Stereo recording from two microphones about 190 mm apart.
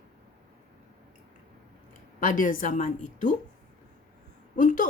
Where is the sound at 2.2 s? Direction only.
45° left (ahead or behind).